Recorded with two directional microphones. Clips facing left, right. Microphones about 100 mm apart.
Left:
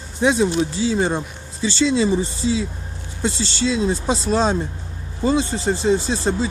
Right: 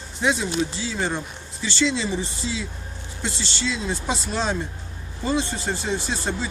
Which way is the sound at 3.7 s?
30° left (ahead or behind).